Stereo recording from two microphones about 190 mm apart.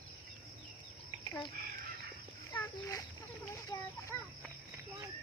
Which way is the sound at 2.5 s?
15° left (ahead or behind).